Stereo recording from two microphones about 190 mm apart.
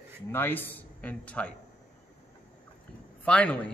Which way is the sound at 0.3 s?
10° left (ahead or behind).